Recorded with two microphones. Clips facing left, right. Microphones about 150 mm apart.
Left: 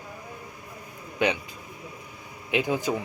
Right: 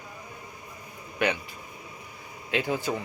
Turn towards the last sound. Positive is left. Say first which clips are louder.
# left 2 dB
turn(degrees=15)  # may be behind; listen again after turning